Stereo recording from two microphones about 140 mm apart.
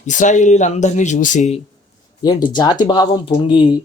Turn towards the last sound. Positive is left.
turn(degrees=35)  # may be behind; listen again after turning